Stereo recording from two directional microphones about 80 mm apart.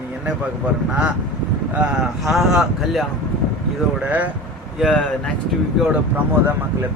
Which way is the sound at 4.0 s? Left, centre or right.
Right.